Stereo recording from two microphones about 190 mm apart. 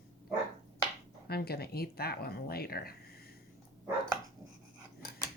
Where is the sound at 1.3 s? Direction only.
55° left (ahead or behind).